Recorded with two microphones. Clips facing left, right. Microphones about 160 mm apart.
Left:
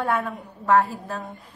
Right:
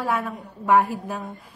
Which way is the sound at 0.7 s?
15° right (ahead or behind).